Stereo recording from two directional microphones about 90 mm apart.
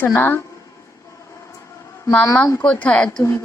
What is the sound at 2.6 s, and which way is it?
Speech, 15° left (ahead or behind).